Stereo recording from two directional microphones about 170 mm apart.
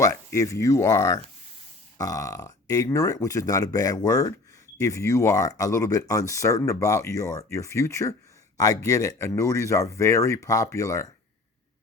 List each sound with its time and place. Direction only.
0.0 s speech: 20° left (ahead or behind)